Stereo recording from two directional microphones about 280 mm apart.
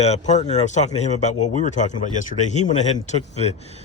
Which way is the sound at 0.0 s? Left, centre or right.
Left.